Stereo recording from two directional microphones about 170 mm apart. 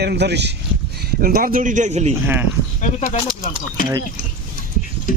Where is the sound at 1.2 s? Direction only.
55° right (ahead or behind).